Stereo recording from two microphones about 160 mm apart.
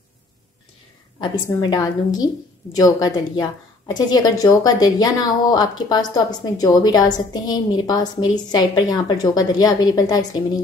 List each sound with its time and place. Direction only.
1.2 s a woman's voice: 25° left (ahead or behind)